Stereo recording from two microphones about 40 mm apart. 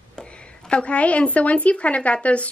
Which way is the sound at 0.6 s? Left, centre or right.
Left.